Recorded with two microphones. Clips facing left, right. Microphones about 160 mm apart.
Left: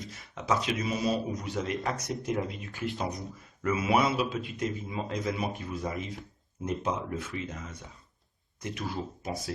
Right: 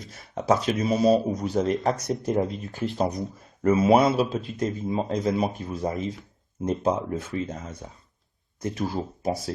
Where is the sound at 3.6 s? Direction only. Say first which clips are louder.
Right 8 dB; 40° right (ahead or behind).